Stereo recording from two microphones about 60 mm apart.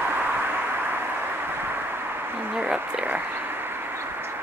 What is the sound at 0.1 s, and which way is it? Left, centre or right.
Vehicle, right.